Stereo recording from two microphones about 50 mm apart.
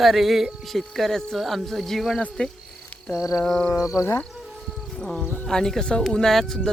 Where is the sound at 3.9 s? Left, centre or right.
Left.